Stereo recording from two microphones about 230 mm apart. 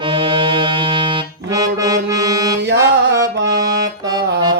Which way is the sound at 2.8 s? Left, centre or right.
Centre.